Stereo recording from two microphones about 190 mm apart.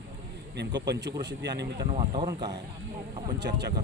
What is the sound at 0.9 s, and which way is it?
Speech, 65° right (ahead or behind).